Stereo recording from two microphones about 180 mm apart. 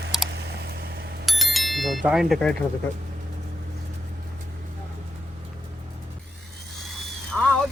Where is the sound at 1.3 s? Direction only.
Centre (ahead or behind).